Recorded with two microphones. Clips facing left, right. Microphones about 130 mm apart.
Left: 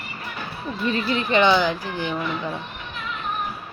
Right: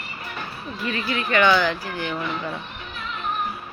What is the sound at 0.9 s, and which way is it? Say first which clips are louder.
Speech: left 3 dB; 30° left (ahead or behind).